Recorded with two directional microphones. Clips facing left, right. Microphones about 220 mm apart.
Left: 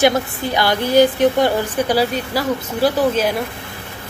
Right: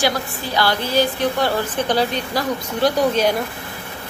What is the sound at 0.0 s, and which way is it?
A woman's voice, 20° left (ahead or behind).